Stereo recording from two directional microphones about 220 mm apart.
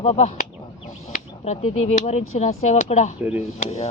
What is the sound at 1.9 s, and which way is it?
Speech, 30° left (ahead or behind).